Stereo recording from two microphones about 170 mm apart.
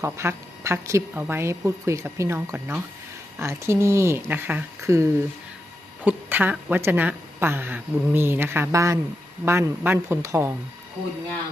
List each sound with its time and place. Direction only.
0.0 s a woman's voice: 15° right (ahead or behind)
6.1 s a woman's voice: 10° right (ahead or behind)